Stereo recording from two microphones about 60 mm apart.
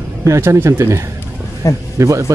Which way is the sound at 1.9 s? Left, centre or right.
Right.